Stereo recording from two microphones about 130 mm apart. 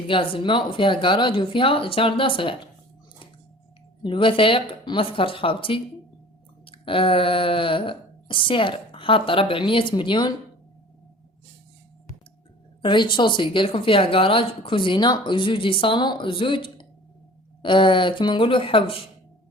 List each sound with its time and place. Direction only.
0.1 s speech: 45° left (ahead or behind)
4.0 s speech: 40° left (ahead or behind)
12.8 s speech: 40° left (ahead or behind)